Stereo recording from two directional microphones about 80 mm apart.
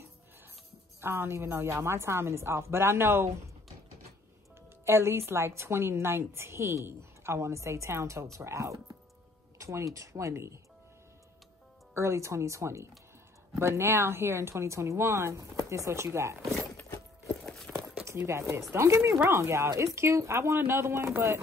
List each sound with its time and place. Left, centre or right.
1.0 s a woman's voice: right
4.8 s a woman's voice: right
11.9 s a woman's voice: right
17.7 s a sound: centre
18.0 s a woman's voice: right